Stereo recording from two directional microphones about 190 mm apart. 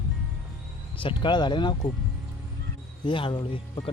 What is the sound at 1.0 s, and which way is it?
Speech, 25° left (ahead or behind).